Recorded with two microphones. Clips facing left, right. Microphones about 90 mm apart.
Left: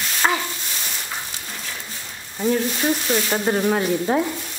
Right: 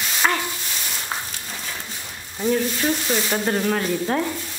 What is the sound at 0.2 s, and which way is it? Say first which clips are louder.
Sizzle: left 1 dB; 10° left (ahead or behind).